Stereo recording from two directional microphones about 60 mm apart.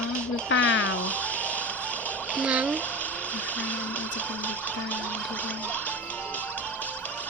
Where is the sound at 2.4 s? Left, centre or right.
Right.